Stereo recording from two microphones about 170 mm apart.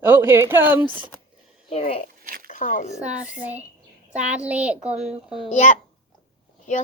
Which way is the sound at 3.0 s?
5° right (ahead or behind).